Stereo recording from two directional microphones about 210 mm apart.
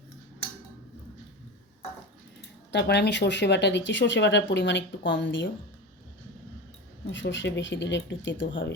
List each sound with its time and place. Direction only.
2.7 s speech: 55° left (ahead or behind)
7.1 s speech: 60° left (ahead or behind)